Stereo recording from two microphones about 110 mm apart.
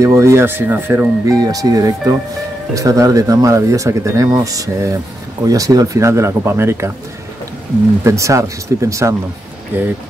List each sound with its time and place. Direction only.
0.0 s speech: 25° right (ahead or behind)
1.2 s speech: 35° right (ahead or behind)
8.0 s speech: 25° right (ahead or behind)